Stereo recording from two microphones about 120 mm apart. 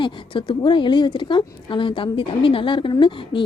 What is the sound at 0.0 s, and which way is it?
A woman's voice, 45° left (ahead or behind).